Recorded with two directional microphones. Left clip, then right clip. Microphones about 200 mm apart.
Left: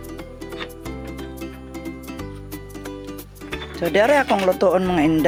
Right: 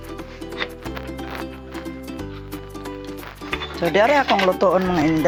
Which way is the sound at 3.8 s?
25° left (ahead or behind).